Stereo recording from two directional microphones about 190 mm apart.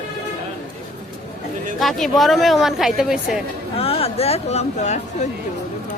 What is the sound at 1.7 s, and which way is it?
Speech, centre (ahead or behind).